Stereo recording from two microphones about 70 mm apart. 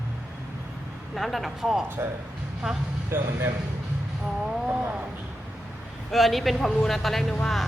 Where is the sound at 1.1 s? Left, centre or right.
Centre.